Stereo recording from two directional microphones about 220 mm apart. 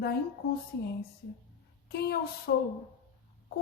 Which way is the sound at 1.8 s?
45° left (ahead or behind).